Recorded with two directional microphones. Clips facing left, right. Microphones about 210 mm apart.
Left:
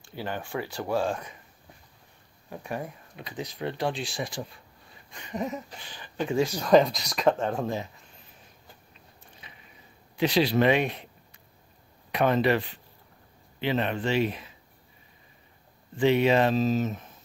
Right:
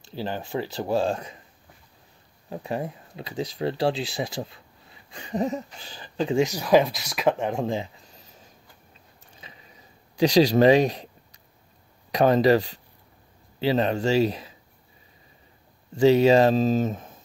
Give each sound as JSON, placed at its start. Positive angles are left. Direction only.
{"t": 0.1, "sound": "speech", "side_deg": -30}
{"t": 2.5, "sound": "speech", "side_deg": -25}
{"t": 5.2, "sound": "speech", "side_deg": -30}
{"t": 6.5, "sound": "speech", "side_deg": -5}
{"t": 7.6, "sound": "speech", "side_deg": -25}
{"t": 10.1, "sound": "speech", "side_deg": -40}
{"t": 12.1, "sound": "speech", "side_deg": -40}
{"t": 16.0, "sound": "speech", "side_deg": -35}